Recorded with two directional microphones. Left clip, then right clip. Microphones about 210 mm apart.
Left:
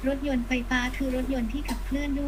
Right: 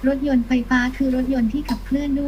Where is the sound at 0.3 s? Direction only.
20° right (ahead or behind).